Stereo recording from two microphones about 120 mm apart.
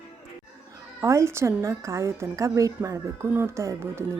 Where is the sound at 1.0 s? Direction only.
25° right (ahead or behind).